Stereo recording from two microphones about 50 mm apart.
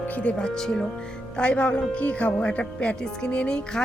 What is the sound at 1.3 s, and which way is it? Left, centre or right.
Speech, left.